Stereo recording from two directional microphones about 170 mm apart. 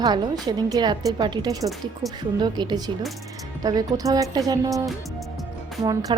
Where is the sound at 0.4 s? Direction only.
25° right (ahead or behind).